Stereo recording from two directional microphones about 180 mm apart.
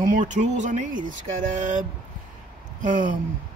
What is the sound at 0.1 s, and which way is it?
Speech, 45° right (ahead or behind).